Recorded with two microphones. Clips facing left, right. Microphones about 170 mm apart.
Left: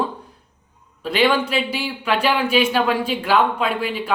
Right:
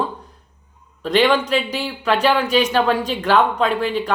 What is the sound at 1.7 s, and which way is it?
Speech, 10° left (ahead or behind).